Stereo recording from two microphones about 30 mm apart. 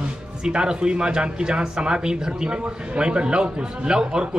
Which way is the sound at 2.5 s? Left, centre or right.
Right.